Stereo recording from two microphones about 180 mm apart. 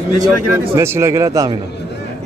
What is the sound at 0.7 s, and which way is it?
Speech, 15° right (ahead or behind).